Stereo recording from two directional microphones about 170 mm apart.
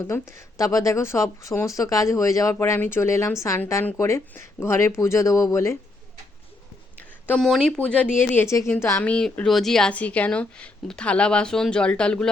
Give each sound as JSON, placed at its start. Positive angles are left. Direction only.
{"t": 0.0, "sound": "speech", "side_deg": 15}
{"t": 7.3, "sound": "speech", "side_deg": 5}